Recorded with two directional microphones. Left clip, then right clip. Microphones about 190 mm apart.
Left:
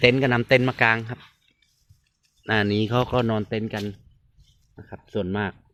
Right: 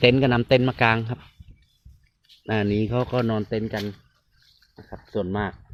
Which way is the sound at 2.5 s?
10° right (ahead or behind).